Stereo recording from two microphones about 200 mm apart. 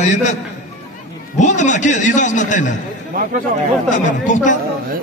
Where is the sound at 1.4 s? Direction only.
35° left (ahead or behind).